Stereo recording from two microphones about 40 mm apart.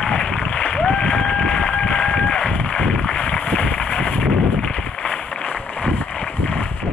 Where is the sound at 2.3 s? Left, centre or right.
Left.